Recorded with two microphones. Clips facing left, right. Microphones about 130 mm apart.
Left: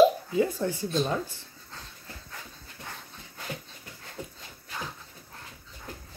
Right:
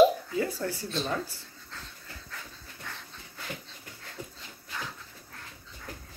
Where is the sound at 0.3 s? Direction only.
20° left (ahead or behind).